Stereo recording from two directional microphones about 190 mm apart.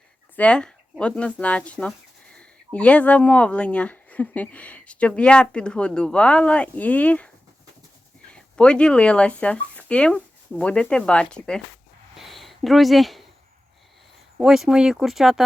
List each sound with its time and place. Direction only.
0.3 s speech: 5° left (ahead or behind)
8.3 s speech: 5° left (ahead or behind)
12.1 s a sound: centre (ahead or behind)
14.3 s speech: centre (ahead or behind)